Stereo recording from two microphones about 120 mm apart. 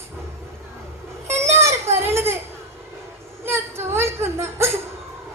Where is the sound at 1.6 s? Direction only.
20° right (ahead or behind).